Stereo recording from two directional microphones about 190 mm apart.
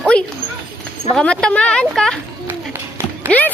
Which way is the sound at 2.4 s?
10° right (ahead or behind).